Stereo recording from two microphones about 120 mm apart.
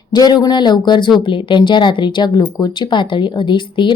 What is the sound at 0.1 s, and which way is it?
A woman's voice, 35° left (ahead or behind).